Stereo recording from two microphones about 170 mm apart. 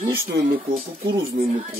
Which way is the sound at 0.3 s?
80° right.